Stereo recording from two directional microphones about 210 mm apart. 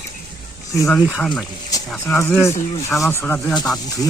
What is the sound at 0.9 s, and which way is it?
Speech, centre (ahead or behind).